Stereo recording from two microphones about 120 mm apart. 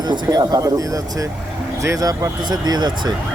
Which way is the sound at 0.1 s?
30° right (ahead or behind).